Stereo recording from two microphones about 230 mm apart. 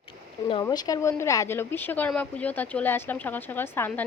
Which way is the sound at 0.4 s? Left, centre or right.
Centre.